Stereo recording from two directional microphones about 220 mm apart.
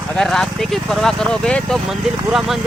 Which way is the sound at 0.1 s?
Centre (ahead or behind).